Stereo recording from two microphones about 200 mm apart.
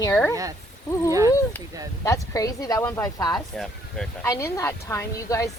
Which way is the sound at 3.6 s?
Centre (ahead or behind).